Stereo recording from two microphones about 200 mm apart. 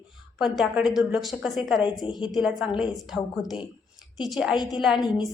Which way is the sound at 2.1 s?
25° left (ahead or behind).